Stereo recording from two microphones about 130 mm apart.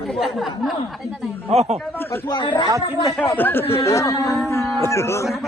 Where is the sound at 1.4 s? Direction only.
55° right (ahead or behind).